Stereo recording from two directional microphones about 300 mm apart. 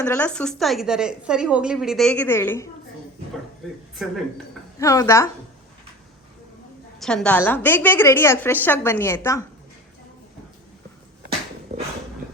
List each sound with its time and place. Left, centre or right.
0.0 s a woman's voice: centre
3.9 s a woman's voice: centre
4.8 s a woman's voice: centre
7.0 s a woman's voice: centre
11.7 s a sound: right